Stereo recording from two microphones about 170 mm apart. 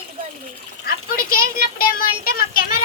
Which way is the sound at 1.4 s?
55° left (ahead or behind).